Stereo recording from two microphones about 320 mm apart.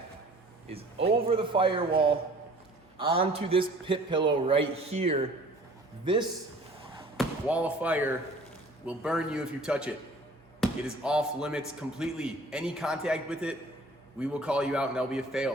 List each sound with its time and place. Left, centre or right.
1.0 s a man's voice: centre
3.0 s a man's voice: centre
7.2 s speech: centre